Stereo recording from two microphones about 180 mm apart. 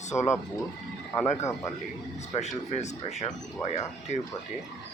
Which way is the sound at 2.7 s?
40° left (ahead or behind).